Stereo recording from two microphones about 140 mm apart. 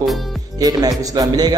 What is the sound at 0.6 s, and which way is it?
Speech, 25° right (ahead or behind).